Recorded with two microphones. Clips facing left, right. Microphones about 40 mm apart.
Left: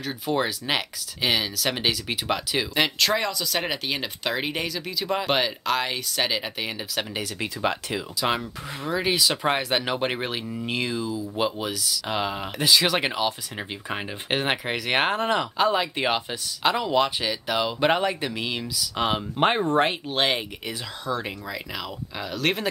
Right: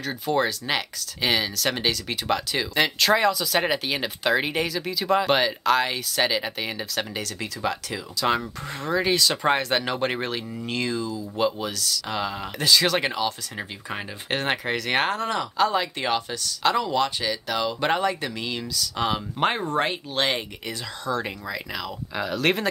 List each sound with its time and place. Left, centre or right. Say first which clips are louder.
0.0 s speech: right 2 dB; centre
7.3 s speech: left 2 dB; left
8.4 s speech: right 2 dB; centre; by 20.2 s left
20.2 s speech: even; centre